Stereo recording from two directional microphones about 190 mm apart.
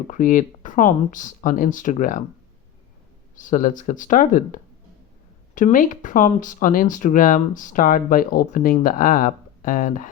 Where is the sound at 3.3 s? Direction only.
45° left (ahead or behind).